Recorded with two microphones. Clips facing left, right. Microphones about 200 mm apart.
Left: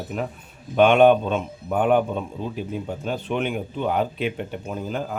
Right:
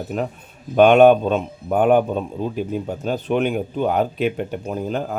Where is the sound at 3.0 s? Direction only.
40° right (ahead or behind).